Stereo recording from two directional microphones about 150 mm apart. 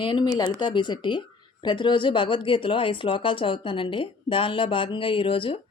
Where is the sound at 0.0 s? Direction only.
30° left (ahead or behind).